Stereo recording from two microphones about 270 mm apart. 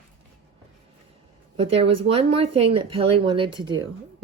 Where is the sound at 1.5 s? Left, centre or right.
Right.